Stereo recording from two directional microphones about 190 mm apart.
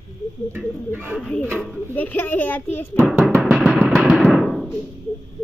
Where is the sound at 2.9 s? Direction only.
5° right (ahead or behind).